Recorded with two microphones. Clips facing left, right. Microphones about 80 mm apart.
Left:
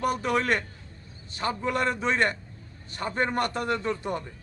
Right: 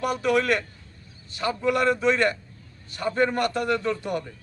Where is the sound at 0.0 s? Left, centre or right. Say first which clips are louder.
Right 3 dB; left.